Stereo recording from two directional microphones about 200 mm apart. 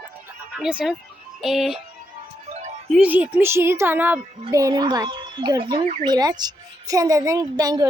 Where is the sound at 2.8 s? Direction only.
5° right (ahead or behind).